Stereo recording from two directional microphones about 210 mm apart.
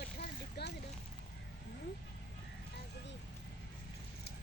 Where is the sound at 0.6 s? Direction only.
50° left (ahead or behind).